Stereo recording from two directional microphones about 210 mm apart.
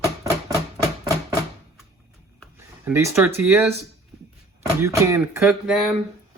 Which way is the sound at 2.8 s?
15° right (ahead or behind).